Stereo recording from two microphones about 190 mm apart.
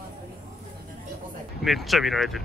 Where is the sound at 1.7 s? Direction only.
Centre (ahead or behind).